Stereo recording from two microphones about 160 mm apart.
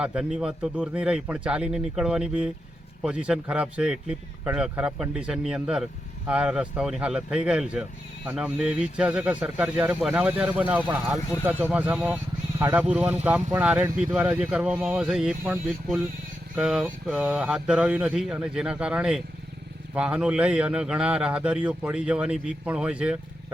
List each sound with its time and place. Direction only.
0.0 s speech: 5° right (ahead or behind)